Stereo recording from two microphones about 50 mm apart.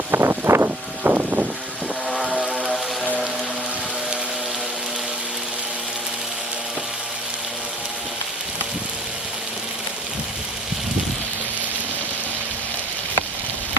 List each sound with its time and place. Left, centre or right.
0.1 s vehicle: right
1.0 s wind: right
2.0 s boat: centre